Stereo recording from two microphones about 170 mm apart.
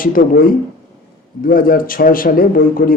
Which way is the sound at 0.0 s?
55° left (ahead or behind).